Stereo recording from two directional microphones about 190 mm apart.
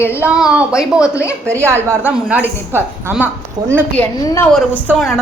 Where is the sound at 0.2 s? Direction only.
5° right (ahead or behind).